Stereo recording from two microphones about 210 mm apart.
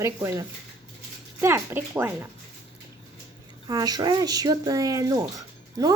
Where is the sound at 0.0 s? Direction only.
15° right (ahead or behind).